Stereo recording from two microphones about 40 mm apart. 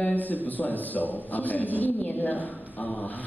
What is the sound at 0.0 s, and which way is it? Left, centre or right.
A woman's voice, left.